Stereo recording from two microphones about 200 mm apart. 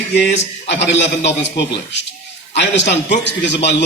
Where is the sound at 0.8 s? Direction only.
60° left (ahead or behind).